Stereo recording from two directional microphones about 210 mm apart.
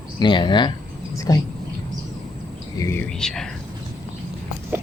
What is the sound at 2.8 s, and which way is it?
Speech, 10° left (ahead or behind).